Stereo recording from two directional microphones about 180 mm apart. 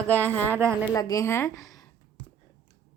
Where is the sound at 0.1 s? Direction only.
10° left (ahead or behind).